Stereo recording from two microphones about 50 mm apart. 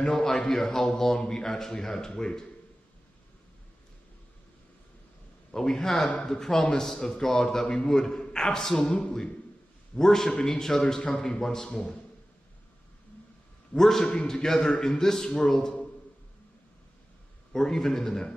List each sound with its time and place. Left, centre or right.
0.1 s a man's voice: centre
5.5 s a man's voice: centre
8.7 s a man's voice: left
9.9 s a man's voice: centre
13.7 s a man's voice: centre
14.0 s a man's voice: centre
17.5 s a man's voice: centre